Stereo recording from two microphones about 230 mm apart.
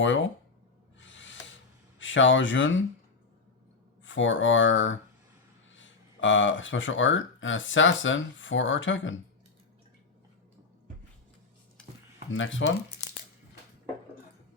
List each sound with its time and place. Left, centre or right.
0.0 s speech: left
0.9 s owl: left
2.0 s speech: left
4.0 s speech: left
12.3 s speech: left